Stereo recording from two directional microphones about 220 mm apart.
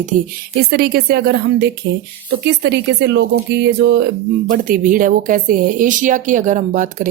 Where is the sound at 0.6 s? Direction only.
45° right (ahead or behind).